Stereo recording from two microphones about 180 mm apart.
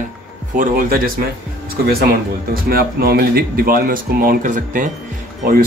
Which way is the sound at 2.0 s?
55° right (ahead or behind).